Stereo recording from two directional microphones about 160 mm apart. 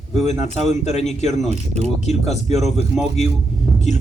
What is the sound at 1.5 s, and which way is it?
Speech, 45° right (ahead or behind).